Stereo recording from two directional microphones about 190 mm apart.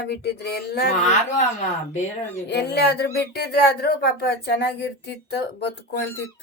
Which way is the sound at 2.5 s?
60° left (ahead or behind).